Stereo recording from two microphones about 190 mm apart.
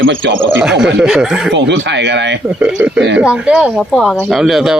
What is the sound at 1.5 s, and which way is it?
Speech, 70° right (ahead or behind).